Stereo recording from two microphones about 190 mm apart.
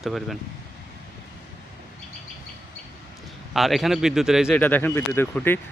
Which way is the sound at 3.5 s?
Centre (ahead or behind).